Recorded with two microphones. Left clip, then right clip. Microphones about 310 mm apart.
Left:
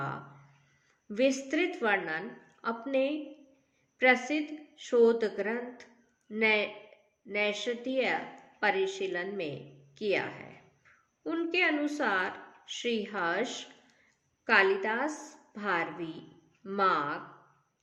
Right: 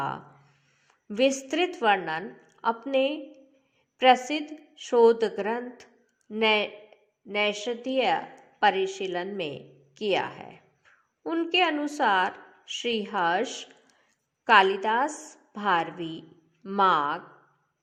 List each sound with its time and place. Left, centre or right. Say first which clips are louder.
1.1 s a woman's voice: right 4 dB; right